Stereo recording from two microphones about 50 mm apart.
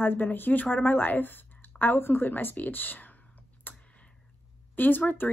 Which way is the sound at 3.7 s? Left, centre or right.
Left.